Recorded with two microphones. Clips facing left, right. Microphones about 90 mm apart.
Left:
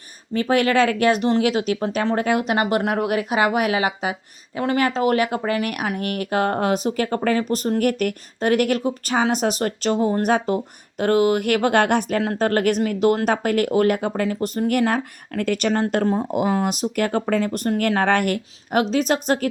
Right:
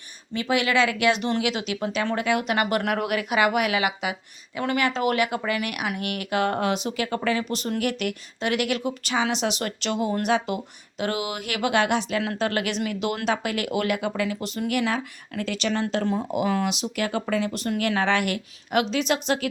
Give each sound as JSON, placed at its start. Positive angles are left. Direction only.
{"t": 0.3, "sound": "a woman's voice", "side_deg": 40}
{"t": 12.2, "sound": "a woman's voice", "side_deg": 40}